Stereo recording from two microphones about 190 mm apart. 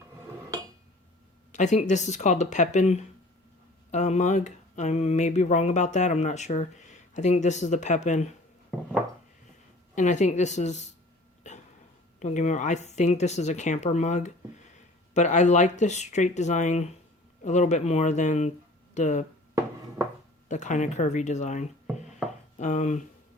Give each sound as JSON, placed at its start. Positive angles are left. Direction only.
{"t": 1.5, "sound": "speech", "side_deg": 40}
{"t": 9.9, "sound": "speech", "side_deg": 40}
{"t": 12.2, "sound": "speech", "side_deg": 40}
{"t": 20.5, "sound": "speech", "side_deg": 40}